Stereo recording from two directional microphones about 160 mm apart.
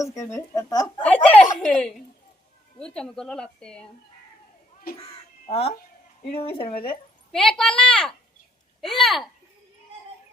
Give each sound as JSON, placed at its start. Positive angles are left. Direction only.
{"t": 0.2, "sound": "speech", "side_deg": 20}
{"t": 1.0, "sound": "a sound", "side_deg": 10}
{"t": 1.5, "sound": "a woman's voice", "side_deg": 5}
{"t": 4.9, "sound": "speech", "side_deg": 65}
{"t": 5.5, "sound": "speech", "side_deg": 40}
{"t": 7.3, "sound": "a woman's voice", "side_deg": 5}